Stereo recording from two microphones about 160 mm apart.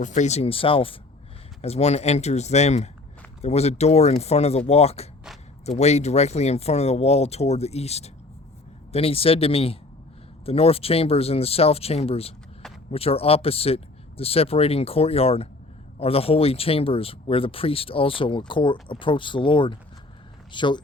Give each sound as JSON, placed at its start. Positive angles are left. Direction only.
{"t": 0.0, "sound": "speech", "side_deg": 50}